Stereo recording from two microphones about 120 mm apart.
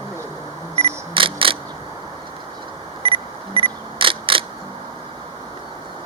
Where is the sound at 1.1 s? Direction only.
45° right (ahead or behind).